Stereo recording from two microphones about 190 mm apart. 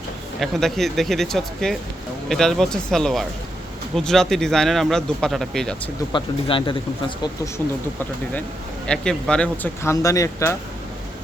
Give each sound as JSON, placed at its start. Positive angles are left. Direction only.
{"t": 0.3, "sound": "speech", "side_deg": 0}
{"t": 6.1, "sound": "speech", "side_deg": 25}
{"t": 8.9, "sound": "speech", "side_deg": 5}